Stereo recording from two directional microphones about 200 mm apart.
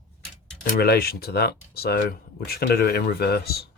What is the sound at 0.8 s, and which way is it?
Speech, 50° left (ahead or behind).